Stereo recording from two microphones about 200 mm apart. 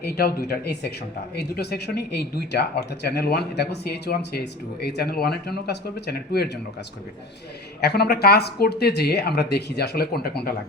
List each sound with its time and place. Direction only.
0.0 s speech: 50° left (ahead or behind)
7.8 s speech: 55° left (ahead or behind)